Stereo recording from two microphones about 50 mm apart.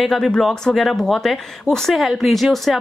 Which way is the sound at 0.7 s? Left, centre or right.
Centre.